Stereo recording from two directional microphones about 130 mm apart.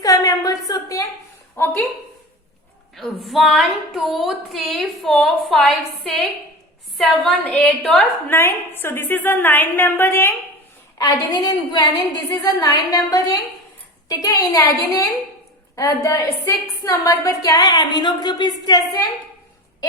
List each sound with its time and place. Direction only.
0.0 s a sound: 25° left (ahead or behind)
2.9 s female singing: centre (ahead or behind)
8.3 s a woman's voice: 15° left (ahead or behind)
10.9 s a woman's voice: 30° left (ahead or behind)